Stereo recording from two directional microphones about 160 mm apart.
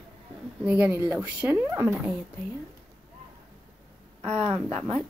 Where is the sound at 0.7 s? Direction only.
10° right (ahead or behind).